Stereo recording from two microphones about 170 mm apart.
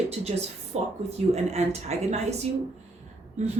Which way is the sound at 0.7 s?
40° right (ahead or behind).